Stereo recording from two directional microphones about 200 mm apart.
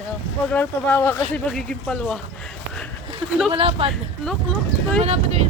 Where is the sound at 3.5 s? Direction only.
25° right (ahead or behind).